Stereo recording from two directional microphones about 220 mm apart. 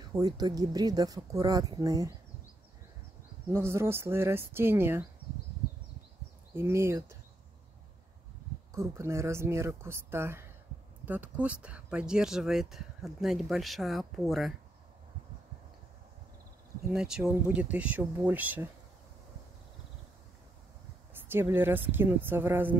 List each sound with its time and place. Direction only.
0.1 s speech: 20° right (ahead or behind)
3.4 s speech: 10° right (ahead or behind)
6.5 s speech: 10° right (ahead or behind)
8.7 s speech: 15° right (ahead or behind)
16.9 s speech: 5° right (ahead or behind)
21.1 s speech: 10° right (ahead or behind)